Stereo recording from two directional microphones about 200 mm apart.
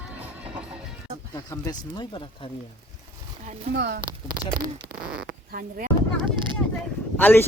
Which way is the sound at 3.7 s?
55° right (ahead or behind).